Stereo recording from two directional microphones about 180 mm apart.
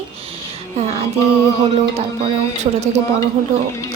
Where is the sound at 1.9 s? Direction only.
35° right (ahead or behind).